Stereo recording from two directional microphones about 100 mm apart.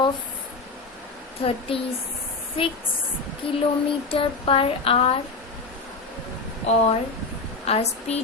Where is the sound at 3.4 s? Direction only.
60° left (ahead or behind).